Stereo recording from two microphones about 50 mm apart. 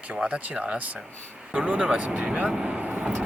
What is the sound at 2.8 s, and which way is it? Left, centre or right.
Vehicle, right.